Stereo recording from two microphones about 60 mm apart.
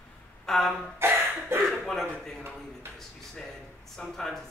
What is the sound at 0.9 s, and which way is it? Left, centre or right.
Cough, right.